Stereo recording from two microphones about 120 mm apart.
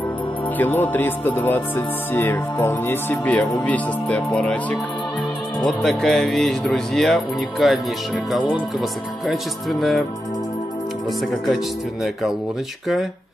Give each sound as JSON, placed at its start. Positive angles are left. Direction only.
{"t": 0.6, "sound": "speech", "side_deg": 15}
{"t": 11.1, "sound": "speech", "side_deg": 0}